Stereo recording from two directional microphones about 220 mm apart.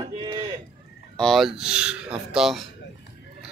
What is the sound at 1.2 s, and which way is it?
Speech, centre (ahead or behind).